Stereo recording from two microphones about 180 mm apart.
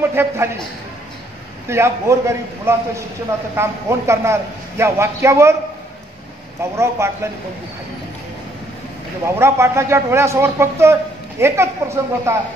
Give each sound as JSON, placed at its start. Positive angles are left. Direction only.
{"t": 0.1, "sound": "speech", "side_deg": -15}
{"t": 1.7, "sound": "speech", "side_deg": -15}
{"t": 6.6, "sound": "speech", "side_deg": -15}
{"t": 9.2, "sound": "speech", "side_deg": -15}